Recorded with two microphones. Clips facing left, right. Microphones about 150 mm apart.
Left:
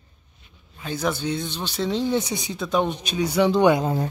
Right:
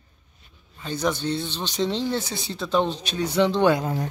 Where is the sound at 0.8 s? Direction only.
10° left (ahead or behind).